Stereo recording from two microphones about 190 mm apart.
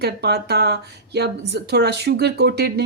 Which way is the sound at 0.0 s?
60° right (ahead or behind).